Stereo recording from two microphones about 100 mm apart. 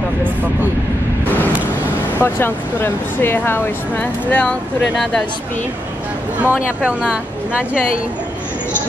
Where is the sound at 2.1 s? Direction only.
20° left (ahead or behind).